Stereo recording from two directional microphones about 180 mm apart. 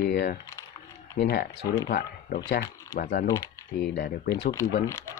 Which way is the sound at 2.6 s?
20° left (ahead or behind).